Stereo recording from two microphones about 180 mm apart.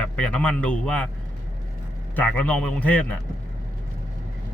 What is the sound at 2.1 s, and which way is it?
Speech, 10° left (ahead or behind).